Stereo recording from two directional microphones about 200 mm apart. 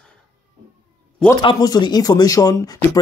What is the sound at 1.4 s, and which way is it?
Speech, 20° left (ahead or behind).